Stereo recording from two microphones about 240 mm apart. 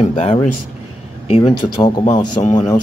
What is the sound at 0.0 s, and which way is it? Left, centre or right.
Speech, left.